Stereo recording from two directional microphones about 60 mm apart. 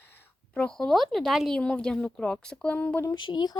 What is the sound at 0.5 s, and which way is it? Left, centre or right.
Speech, centre.